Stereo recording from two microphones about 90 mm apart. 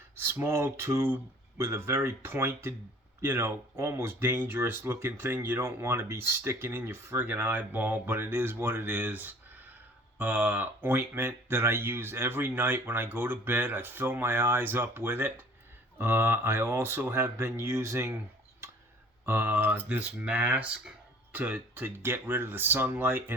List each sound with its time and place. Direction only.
0.2 s speech: 25° right (ahead or behind)
19.2 s speech: 20° right (ahead or behind)